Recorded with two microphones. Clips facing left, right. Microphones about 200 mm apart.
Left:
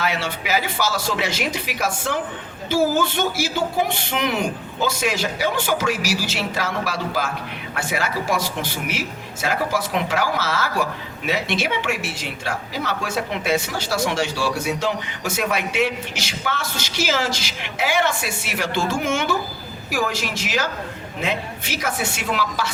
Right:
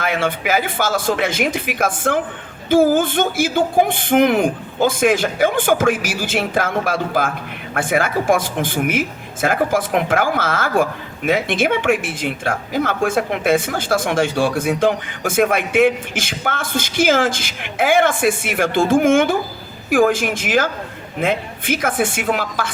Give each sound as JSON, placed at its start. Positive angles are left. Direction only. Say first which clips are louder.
{"t": 0.0, "sound": "speech", "louder": "right 5 dB", "side_deg": -50}